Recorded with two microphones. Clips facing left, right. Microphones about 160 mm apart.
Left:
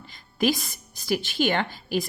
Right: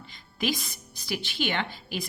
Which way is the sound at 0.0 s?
45° left (ahead or behind).